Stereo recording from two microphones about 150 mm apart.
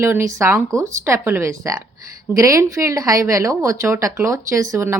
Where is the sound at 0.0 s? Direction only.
15° right (ahead or behind).